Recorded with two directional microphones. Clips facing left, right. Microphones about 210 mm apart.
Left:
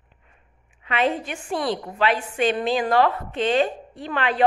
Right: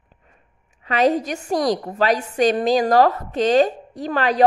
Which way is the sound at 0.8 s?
40° right (ahead or behind).